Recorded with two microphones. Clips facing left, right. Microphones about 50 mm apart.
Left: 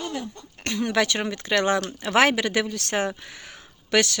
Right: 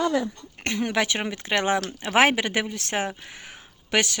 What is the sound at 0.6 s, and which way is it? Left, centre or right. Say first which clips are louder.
Speech: even; right.